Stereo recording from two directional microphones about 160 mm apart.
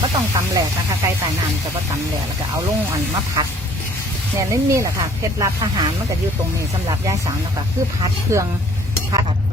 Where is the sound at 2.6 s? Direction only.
20° right (ahead or behind).